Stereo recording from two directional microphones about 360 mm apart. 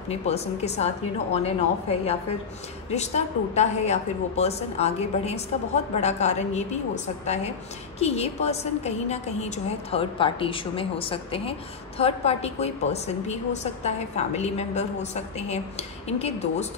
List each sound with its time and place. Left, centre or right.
0.1 s a woman's voice: centre
8.0 s a woman's voice: centre